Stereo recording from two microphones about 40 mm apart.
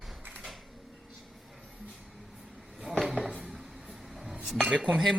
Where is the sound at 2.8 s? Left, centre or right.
Centre.